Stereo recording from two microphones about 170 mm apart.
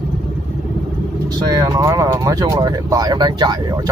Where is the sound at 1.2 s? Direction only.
25° right (ahead or behind).